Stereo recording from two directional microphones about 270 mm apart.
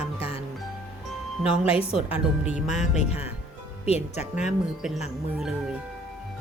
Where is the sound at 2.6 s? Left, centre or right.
Left.